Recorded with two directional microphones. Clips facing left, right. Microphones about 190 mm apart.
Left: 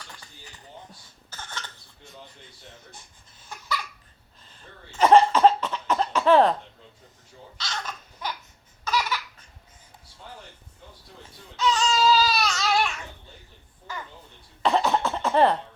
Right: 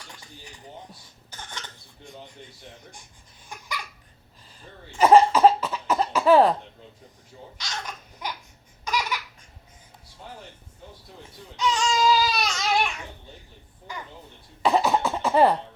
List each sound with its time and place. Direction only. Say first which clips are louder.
1.3 s cough: left 1 dB; 15° right (ahead or behind)
4.9 s cough: right 1 dB; 10° right (ahead or behind)
7.6 s babbling: left 1 dB; 15° right (ahead or behind)
8.8 s laughter: left 1 dB; 15° right (ahead or behind)
11.5 s baby cry: left 1 dB; 15° right (ahead or behind)
13.9 s a sound: left 1 dB; 15° right (ahead or behind)
14.6 s cough: right 1 dB; 10° right (ahead or behind)